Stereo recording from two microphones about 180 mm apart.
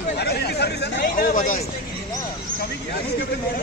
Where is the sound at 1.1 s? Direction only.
45° left (ahead or behind).